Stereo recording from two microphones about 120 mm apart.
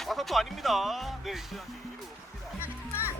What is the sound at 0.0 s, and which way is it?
Speech, centre (ahead or behind).